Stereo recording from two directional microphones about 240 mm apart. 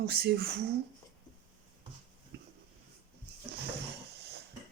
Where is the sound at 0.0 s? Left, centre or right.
Right.